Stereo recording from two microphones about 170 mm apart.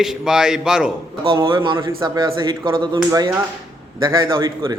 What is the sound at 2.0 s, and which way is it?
Speech, 25° right (ahead or behind).